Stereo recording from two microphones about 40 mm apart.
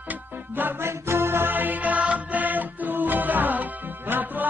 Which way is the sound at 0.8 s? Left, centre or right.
Right.